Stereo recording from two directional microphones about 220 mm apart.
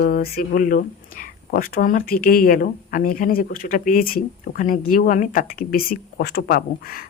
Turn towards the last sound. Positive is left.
turn(degrees=40)  # may be behind; listen again after turning